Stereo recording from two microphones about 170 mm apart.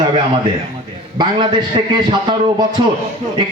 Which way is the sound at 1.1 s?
25° right (ahead or behind).